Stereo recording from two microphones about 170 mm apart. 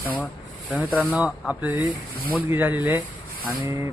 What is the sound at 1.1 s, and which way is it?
Speech, 5° right (ahead or behind).